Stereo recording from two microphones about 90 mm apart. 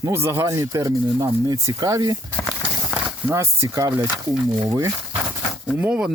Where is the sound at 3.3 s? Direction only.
35° right (ahead or behind).